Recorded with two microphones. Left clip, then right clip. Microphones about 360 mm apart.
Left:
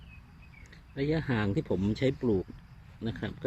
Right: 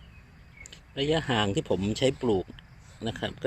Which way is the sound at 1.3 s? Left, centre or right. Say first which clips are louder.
Right 5 dB; right.